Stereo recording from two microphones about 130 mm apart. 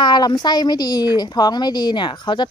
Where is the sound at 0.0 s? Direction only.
35° left (ahead or behind).